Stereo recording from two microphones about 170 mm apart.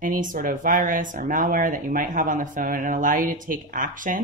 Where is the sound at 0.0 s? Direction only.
50° right (ahead or behind).